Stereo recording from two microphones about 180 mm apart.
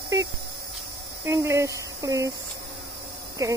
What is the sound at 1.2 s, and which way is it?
Speech, 15° right (ahead or behind).